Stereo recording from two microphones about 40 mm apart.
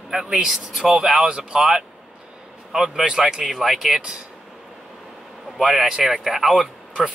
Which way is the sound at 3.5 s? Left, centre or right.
Centre.